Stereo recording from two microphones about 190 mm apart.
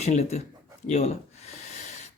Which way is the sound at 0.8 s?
35° left (ahead or behind).